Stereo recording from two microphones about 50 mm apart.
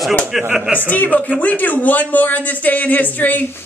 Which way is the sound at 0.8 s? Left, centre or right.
Left.